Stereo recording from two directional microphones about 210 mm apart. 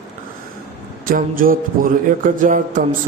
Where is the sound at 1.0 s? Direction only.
40° right (ahead or behind).